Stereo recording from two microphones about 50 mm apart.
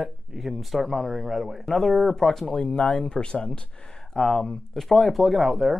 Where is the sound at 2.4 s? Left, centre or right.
Left.